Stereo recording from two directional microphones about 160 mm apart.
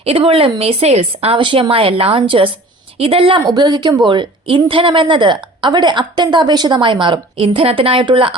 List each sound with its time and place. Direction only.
0.0 s a woman's voice: 40° right (ahead or behind)